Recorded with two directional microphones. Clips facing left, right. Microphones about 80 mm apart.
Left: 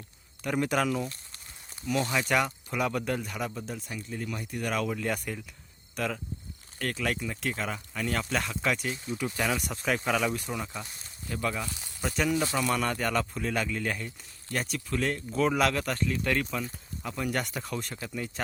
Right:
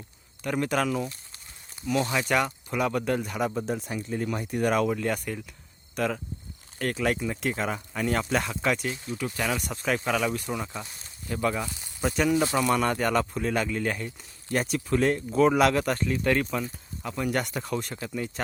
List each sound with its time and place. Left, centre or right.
0.4 s speech: centre
2.0 s speech: centre
3.5 s speech: right
4.1 s speech: right
4.9 s speech: centre
6.7 s speech: centre
9.0 s speech: centre
11.7 s a sound: centre
12.0 s speech: centre
12.4 s speech: right
12.6 s speech: centre
14.5 s speech: centre